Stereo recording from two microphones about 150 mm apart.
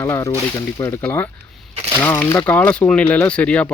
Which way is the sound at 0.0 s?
15° left (ahead or behind).